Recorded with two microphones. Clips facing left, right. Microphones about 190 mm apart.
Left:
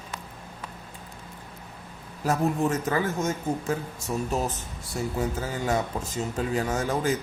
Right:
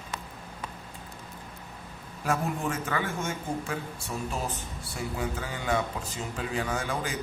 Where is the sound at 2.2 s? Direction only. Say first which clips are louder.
Left 5 dB; 40° left (ahead or behind).